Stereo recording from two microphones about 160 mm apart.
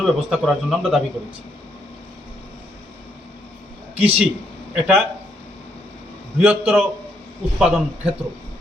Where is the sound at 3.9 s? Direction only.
40° right (ahead or behind).